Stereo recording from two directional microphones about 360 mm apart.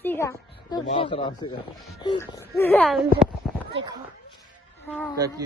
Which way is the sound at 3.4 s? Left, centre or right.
Centre.